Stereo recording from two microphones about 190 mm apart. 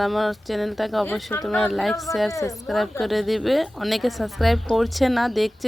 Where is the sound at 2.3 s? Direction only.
15° left (ahead or behind).